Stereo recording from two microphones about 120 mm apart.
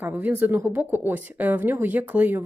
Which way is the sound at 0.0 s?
15° right (ahead or behind).